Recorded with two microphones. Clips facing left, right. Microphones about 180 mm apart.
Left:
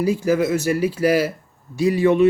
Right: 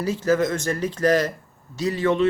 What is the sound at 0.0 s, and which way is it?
A man's voice, 10° left (ahead or behind).